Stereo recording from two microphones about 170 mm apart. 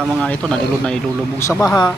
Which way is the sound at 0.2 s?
5° left (ahead or behind).